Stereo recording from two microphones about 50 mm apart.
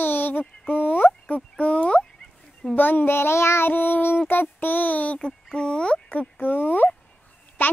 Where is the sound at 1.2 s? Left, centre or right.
Left.